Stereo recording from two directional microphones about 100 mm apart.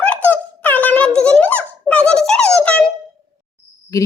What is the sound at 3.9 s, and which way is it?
Speech, 35° left (ahead or behind).